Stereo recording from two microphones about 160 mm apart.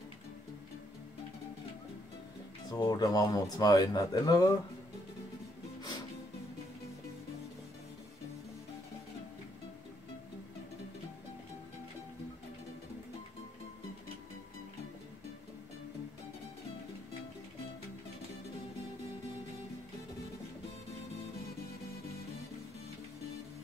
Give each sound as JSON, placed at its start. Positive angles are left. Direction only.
{"t": 2.7, "sound": "speech", "side_deg": 25}